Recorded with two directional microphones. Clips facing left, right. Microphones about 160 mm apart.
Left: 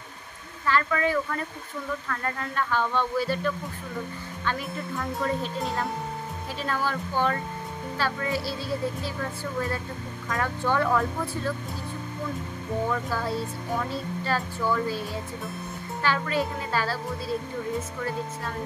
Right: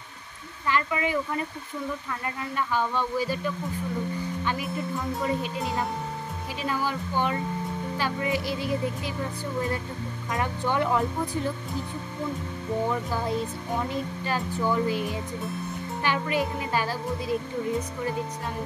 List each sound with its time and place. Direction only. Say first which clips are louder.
0.7 s speech: left 2 dB; 15° right (ahead or behind)
6.6 s speech: even; 10° right (ahead or behind)
12.9 s speech: right 1 dB; 15° right (ahead or behind)